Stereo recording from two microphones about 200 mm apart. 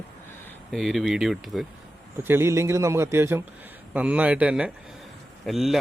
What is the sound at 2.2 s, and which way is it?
Speech, 10° right (ahead or behind).